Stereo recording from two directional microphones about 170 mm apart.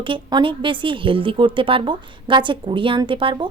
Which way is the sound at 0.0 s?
25° right (ahead or behind).